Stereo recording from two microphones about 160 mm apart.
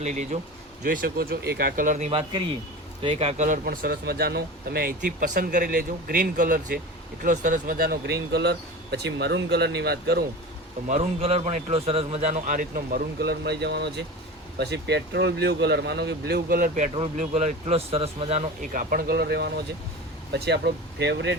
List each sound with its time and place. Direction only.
0.0 s a man's voice: 45° right (ahead or behind)
0.9 s speech: 65° right (ahead or behind); by 10.2 s 80° right
10.8 s a man's voice: 40° right (ahead or behind); by 16.9 s 55° right (ahead or behind)
17.2 s speech: 45° right (ahead or behind)
18.7 s speech: 60° right (ahead or behind); by 21.3 s 90° right